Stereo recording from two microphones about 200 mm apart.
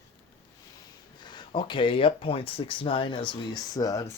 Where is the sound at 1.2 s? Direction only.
25° left (ahead or behind).